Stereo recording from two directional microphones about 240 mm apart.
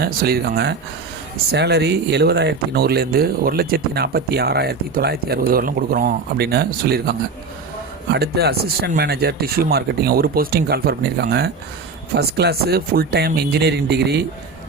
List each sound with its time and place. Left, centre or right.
0.0 s speech: right